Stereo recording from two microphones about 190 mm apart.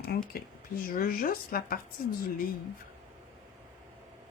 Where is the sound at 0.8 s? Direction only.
50° left (ahead or behind).